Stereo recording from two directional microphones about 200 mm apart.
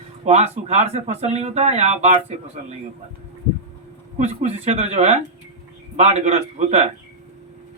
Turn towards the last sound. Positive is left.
turn(degrees=-35)  # may be behind; listen again after turning